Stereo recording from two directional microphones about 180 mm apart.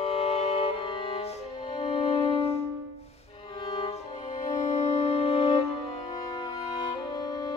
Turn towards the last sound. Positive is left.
turn(degrees=20)  # may be behind; listen again after turning